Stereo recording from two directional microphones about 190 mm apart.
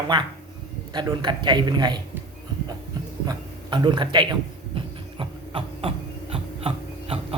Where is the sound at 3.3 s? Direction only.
25° right (ahead or behind).